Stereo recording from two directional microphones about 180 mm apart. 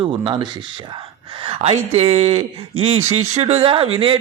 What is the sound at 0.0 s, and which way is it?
Speech, 25° right (ahead or behind).